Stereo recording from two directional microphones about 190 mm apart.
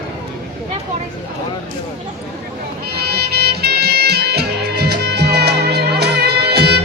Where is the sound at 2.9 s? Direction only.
55° right (ahead or behind).